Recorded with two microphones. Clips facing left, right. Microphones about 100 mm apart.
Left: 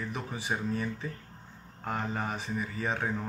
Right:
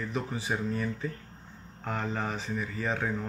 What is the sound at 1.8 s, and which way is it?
Speech, 15° left (ahead or behind).